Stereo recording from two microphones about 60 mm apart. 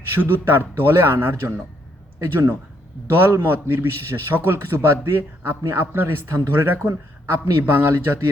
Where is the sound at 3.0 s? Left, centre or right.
Right.